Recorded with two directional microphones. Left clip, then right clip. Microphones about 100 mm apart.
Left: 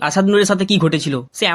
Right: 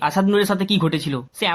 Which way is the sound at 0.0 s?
35° left (ahead or behind).